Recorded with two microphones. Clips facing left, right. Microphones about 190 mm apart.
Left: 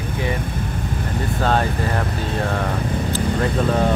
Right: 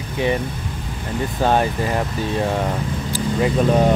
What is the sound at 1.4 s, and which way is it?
Speech, 15° right (ahead or behind).